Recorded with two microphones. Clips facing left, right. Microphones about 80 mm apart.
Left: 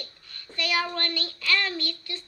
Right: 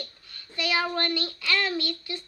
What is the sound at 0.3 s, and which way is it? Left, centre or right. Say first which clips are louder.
A child's voice: right 1 dB; centre.